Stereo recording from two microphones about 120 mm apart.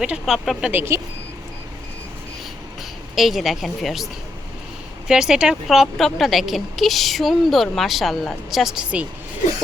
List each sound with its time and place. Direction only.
0.0 s a woman's voice: 5° right (ahead or behind)
0.7 s speech: 20° right (ahead or behind)
3.2 s a woman's voice: centre (ahead or behind)